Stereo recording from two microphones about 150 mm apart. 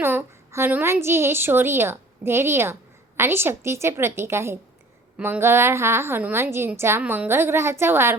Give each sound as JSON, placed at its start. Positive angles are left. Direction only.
{"t": 0.0, "sound": "a woman's voice", "side_deg": -15}